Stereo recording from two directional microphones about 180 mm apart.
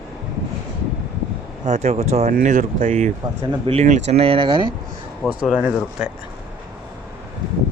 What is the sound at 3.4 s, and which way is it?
Speech, 30° right (ahead or behind).